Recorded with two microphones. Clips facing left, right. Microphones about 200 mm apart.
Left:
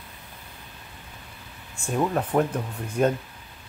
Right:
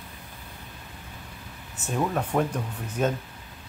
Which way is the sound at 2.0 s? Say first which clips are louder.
Left 2 dB; 5° left (ahead or behind).